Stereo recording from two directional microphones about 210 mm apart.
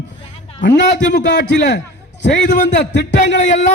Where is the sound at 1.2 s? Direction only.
55° left (ahead or behind).